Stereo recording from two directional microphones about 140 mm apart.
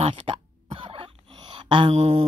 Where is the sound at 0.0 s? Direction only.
40° right (ahead or behind).